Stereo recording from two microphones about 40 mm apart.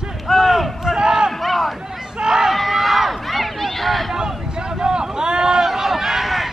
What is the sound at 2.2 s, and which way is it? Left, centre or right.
Run, centre.